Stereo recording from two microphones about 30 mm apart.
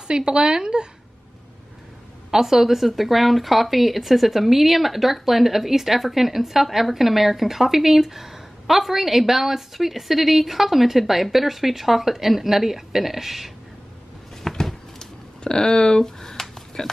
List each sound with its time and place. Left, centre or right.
0.1 s a woman's voice: right
2.3 s a woman's voice: centre
14.5 s a sound: centre
16.8 s speech: centre